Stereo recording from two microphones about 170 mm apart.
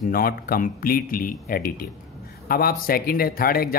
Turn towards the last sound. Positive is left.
turn(degrees=60)  # may be behind; listen again after turning